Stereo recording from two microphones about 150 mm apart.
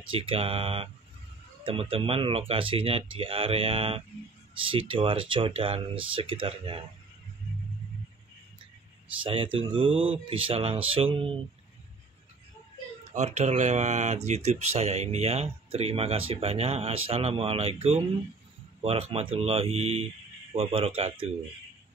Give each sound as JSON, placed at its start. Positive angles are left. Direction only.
{"t": 0.1, "sound": "speech", "side_deg": -35}
{"t": 9.2, "sound": "speech", "side_deg": -35}
{"t": 13.1, "sound": "speech", "side_deg": -50}